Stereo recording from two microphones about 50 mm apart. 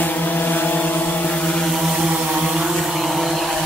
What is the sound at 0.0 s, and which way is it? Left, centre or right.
Vehicle, left.